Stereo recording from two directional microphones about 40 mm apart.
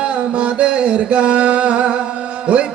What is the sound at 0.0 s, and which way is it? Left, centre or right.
Music, right.